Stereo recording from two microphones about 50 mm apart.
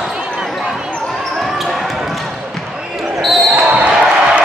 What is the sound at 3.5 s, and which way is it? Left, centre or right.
Basketball bounce, right.